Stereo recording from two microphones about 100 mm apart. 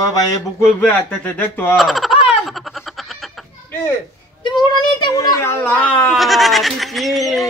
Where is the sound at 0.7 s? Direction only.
20° left (ahead or behind).